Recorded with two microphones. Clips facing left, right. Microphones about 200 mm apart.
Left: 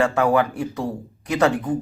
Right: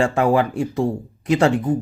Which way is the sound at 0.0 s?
25° right (ahead or behind).